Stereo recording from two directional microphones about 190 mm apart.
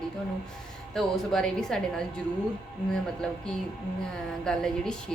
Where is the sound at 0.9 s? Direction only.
Centre (ahead or behind).